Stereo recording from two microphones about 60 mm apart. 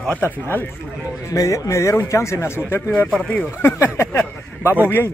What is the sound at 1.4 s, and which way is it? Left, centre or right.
Speech, left.